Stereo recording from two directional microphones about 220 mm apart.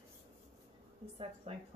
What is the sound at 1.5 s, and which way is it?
Speech, 30° right (ahead or behind).